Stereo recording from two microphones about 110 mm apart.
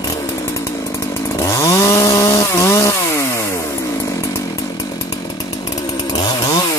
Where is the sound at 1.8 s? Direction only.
30° left (ahead or behind).